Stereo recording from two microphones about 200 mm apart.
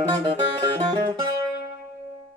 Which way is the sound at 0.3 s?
25° right (ahead or behind).